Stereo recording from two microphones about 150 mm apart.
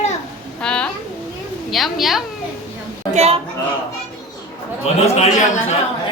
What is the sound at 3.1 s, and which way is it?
Speech, 45° right (ahead or behind).